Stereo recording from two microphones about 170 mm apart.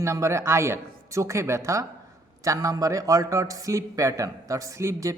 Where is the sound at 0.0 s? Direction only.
15° right (ahead or behind).